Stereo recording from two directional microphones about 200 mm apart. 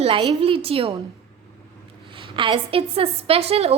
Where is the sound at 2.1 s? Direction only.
25° right (ahead or behind).